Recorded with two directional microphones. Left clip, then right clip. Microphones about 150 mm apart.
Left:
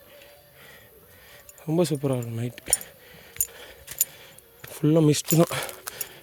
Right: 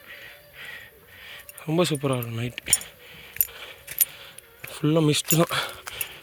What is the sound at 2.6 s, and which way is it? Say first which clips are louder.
Keys jangling: right 5 dB; 40° left (ahead or behind).